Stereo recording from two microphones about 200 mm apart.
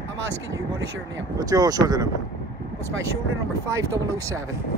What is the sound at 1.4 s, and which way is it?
Speech, 20° right (ahead or behind).